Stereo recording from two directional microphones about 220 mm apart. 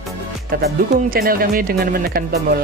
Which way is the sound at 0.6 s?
40° right (ahead or behind).